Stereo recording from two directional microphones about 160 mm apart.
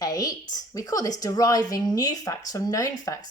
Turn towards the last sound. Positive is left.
turn(degrees=20)  # may be behind; listen again after turning